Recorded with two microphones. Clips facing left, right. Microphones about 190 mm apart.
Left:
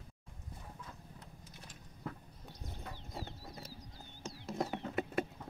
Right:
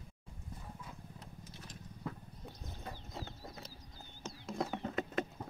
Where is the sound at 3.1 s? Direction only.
10° left (ahead or behind).